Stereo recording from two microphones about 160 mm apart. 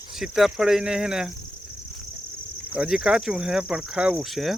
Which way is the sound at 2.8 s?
5° right (ahead or behind).